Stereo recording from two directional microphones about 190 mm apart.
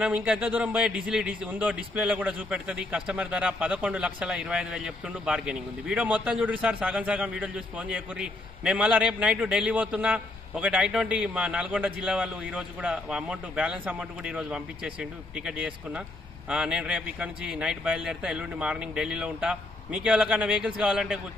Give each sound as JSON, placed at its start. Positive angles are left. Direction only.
{"t": 0.0, "sound": "a man's voice", "side_deg": -5}